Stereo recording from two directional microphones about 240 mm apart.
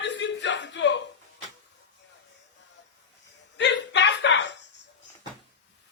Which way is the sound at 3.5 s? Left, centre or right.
Left.